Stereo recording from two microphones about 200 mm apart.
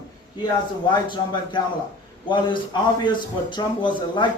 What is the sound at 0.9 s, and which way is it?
A man's voice, 20° left (ahead or behind).